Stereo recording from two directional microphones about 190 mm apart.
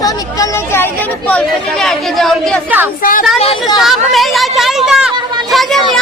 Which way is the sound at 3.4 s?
25° left (ahead or behind).